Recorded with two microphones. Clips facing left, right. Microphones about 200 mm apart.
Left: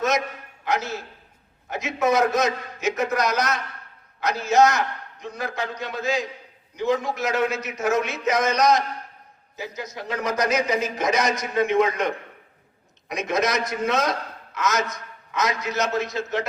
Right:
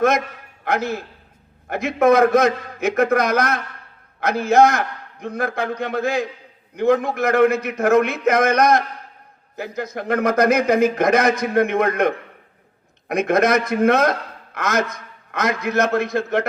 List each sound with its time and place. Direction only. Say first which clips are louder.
0.6 s a man's voice: right 4 dB; 55° right (ahead or behind)